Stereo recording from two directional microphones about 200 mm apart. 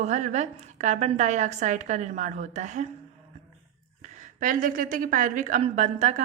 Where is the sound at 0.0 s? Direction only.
35° right (ahead or behind).